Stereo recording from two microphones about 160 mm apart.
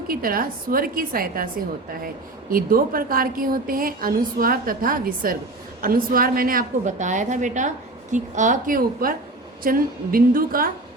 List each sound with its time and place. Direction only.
0.1 s a woman's voice: 65° right (ahead or behind)
2.5 s a woman's voice: 65° right (ahead or behind)